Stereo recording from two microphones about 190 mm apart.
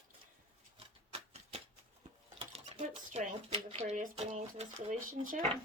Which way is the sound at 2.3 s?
30° right (ahead or behind).